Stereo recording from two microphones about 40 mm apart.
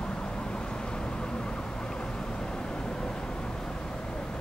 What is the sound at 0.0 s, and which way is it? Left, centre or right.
Vehicle, left.